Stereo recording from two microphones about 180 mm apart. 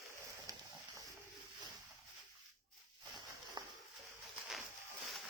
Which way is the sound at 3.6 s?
25° right (ahead or behind).